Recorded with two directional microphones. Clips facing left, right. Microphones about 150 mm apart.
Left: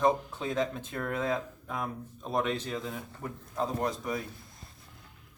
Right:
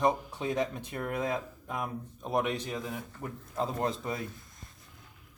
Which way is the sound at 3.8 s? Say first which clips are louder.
Left 1 dB; 25° right (ahead or behind).